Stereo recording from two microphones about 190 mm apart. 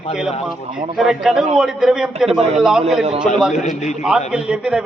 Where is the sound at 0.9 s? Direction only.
5° right (ahead or behind).